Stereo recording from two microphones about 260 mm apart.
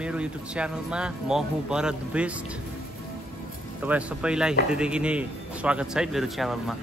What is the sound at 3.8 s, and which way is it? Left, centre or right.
A man's voice, centre.